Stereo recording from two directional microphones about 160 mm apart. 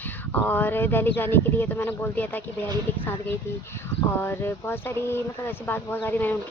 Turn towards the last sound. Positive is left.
turn(degrees=10)  # may be behind; listen again after turning